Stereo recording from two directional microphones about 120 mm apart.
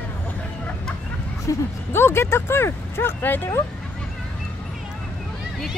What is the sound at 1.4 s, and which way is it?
Speech, 20° left (ahead or behind).